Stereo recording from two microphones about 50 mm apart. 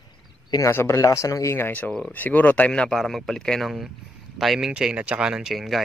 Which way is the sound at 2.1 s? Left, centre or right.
Left.